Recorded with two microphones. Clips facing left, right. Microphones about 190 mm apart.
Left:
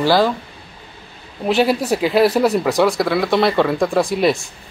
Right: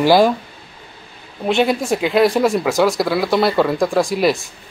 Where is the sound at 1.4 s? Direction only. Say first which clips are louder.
Even; 5° left (ahead or behind).